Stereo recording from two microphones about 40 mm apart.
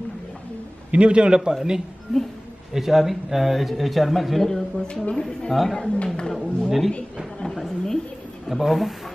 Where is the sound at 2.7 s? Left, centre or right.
Centre.